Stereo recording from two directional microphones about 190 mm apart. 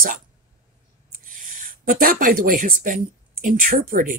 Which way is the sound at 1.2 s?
45° right (ahead or behind).